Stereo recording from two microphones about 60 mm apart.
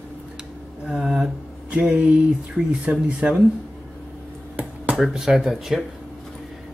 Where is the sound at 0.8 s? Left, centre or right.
Centre.